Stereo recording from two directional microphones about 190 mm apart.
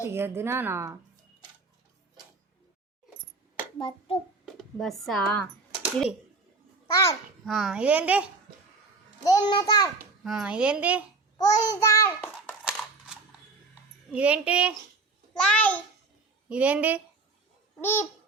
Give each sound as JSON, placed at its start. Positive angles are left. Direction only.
{"t": 0.0, "sound": "a woman's voice", "side_deg": -15}
{"t": 3.8, "sound": "a child's voice", "side_deg": 25}
{"t": 4.4, "sound": "a child's voice", "side_deg": 0}
{"t": 6.9, "sound": "a child's voice", "side_deg": 20}
{"t": 7.4, "sound": "a woman's voice", "side_deg": 0}
{"t": 9.2, "sound": "a child's voice", "side_deg": 20}
{"t": 10.2, "sound": "a woman's voice", "side_deg": -5}
{"t": 11.3, "sound": "a child's voice", "side_deg": 20}
{"t": 14.1, "sound": "a woman's voice", "side_deg": -5}
{"t": 15.4, "sound": "a woman's voice", "side_deg": 5}
{"t": 16.5, "sound": "a woman's voice", "side_deg": -5}
{"t": 17.7, "sound": "babbling", "side_deg": 10}